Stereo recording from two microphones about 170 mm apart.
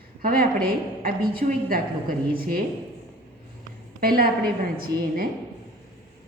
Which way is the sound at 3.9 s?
60° right (ahead or behind).